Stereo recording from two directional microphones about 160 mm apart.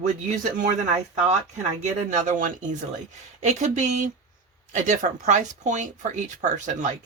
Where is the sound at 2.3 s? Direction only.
50° right (ahead or behind).